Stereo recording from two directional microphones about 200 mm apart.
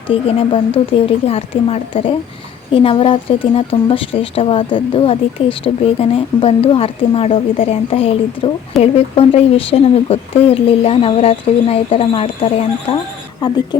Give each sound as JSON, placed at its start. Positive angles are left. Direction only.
{"t": 0.1, "sound": "speech", "side_deg": 25}